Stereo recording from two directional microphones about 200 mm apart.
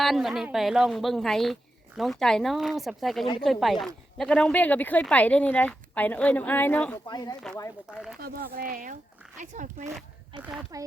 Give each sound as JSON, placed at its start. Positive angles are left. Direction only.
{"t": 0.0, "sound": "a woman's voice", "side_deg": 0}
{"t": 7.1, "sound": "speech", "side_deg": 20}
{"t": 7.9, "sound": "a woman's voice", "side_deg": -5}
{"t": 8.2, "sound": "speech", "side_deg": -50}
{"t": 10.4, "sound": "a woman's voice", "side_deg": -5}